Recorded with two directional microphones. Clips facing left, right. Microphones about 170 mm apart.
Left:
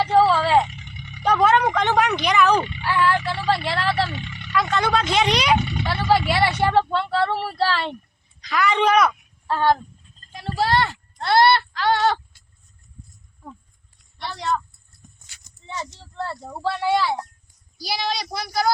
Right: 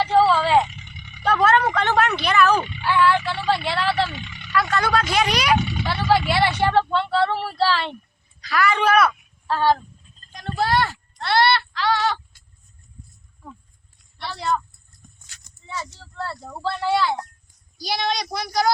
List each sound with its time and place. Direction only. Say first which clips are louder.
0.0 s vehicle: even; 10° left (ahead or behind)
1.2 s a sound: left 1 dB; 15° left (ahead or behind)
2.6 s speech: right 1 dB; 5° left (ahead or behind)
4.7 s speech: left 1 dB; 20° left (ahead or behind)
6.1 s speech: even; 5° left (ahead or behind)
8.4 s speech: even; 20° left (ahead or behind)
10.3 s a sound: even; 5° left (ahead or behind)
11.2 s a sound: left 3 dB; 45° left (ahead or behind)
14.2 s a woman's voice: right 1 dB; 5° right (ahead or behind)
15.6 s speech: even; 25° left (ahead or behind); by 18.7 s 5° left (ahead or behind)